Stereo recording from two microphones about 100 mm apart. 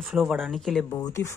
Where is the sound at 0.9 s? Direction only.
35° left (ahead or behind).